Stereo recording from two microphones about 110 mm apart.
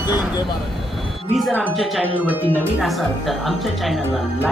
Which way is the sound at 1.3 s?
Centre (ahead or behind).